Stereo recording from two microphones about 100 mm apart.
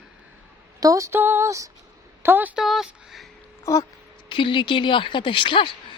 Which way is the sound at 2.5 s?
5° right (ahead or behind).